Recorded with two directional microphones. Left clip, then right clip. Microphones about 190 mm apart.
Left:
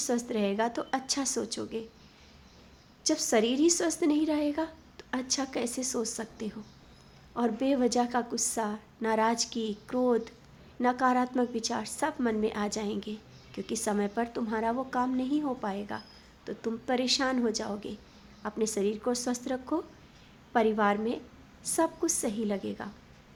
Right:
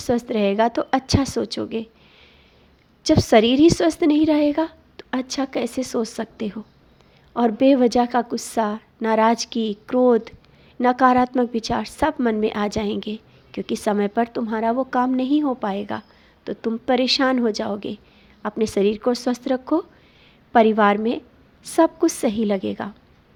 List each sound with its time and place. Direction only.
0.0 s a woman's voice: 30° right (ahead or behind)
3.0 s a woman's voice: 35° right (ahead or behind)